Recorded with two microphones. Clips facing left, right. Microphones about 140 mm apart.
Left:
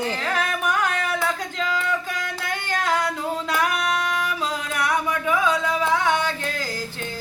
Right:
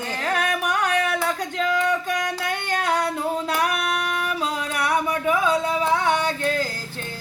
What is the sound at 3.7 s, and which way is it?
Female singing, 55° right (ahead or behind).